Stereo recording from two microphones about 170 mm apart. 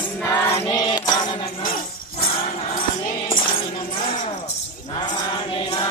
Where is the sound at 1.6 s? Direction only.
55° left (ahead or behind).